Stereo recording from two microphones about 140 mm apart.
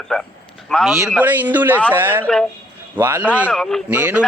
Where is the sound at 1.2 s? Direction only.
10° right (ahead or behind).